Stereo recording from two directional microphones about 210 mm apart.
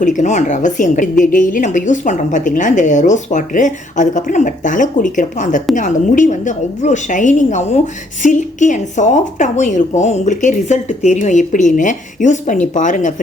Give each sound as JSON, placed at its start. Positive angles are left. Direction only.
{"t": 0.0, "sound": "a woman's voice", "side_deg": 35}